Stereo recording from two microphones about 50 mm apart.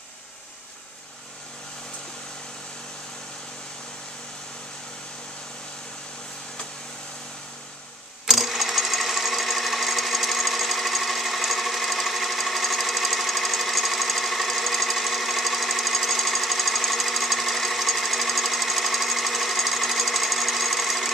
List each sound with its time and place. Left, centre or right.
8.3 s sewing machine: centre